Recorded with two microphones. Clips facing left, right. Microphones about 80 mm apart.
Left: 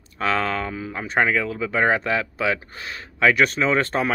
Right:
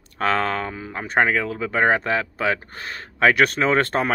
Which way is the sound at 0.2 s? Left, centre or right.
Right.